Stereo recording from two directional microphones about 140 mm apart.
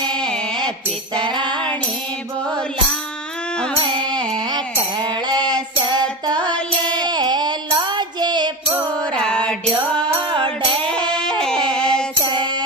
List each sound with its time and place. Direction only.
0.1 s music: 5° left (ahead or behind)
1.3 s child singing: 35° right (ahead or behind)
4.1 s music: 5° left (ahead or behind)
4.9 s music: 30° right (ahead or behind)
6.5 s music: 5° left (ahead or behind)
7.1 s a sound: 30° right (ahead or behind)
7.8 s music: 30° right (ahead or behind)
9.1 s music: 5° left (ahead or behind)
10.1 s music: 40° right (ahead or behind)
10.9 s a sound: 5° left (ahead or behind)
11.7 s music: 5° left (ahead or behind)
12.2 s music: 35° right (ahead or behind)